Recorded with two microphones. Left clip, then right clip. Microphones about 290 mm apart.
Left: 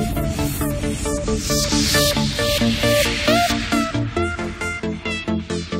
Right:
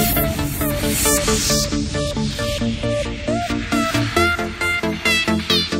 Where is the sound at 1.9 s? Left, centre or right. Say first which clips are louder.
Left 6 dB; left.